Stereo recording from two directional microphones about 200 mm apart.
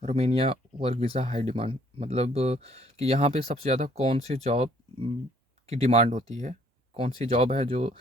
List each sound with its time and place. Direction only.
0.0 s speech: 30° right (ahead or behind)